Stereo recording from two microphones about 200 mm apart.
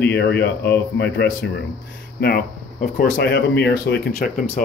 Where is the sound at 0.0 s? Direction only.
55° left (ahead or behind).